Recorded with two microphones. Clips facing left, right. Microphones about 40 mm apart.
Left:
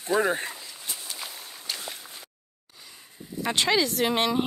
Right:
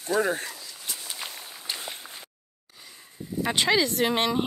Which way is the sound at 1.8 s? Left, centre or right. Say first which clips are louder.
Right 1 dB; right.